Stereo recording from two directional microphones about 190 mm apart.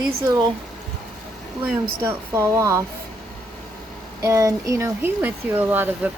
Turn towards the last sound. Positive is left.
turn(degrees=-10)  # may be behind; listen again after turning